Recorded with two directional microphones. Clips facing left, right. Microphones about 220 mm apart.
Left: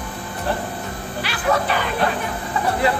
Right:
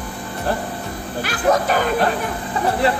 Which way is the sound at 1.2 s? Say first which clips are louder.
Right 3 dB; 45° right (ahead or behind).